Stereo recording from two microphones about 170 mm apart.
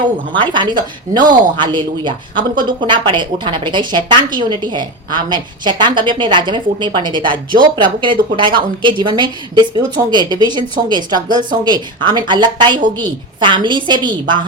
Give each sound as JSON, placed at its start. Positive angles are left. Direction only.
{"t": 0.3, "sound": "speech", "side_deg": -30}